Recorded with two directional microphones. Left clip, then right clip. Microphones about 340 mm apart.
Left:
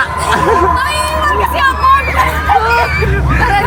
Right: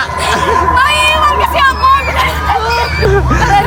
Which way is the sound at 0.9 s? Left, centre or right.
Centre.